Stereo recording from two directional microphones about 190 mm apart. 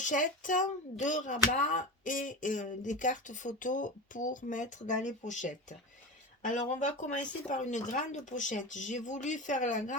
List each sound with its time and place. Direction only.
0.0 s speech: 40° left (ahead or behind)